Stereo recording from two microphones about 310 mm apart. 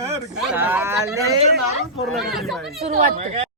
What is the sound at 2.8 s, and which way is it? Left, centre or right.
Speech, right.